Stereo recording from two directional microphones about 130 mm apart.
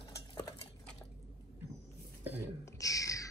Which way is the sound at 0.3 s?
30° left (ahead or behind).